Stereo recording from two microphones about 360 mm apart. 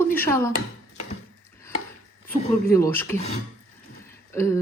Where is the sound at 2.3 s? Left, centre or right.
Left.